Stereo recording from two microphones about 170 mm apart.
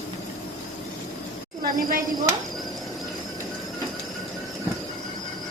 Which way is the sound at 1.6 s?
55° right (ahead or behind).